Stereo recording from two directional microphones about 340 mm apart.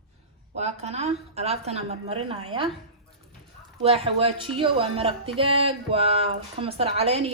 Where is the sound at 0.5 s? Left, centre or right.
Centre.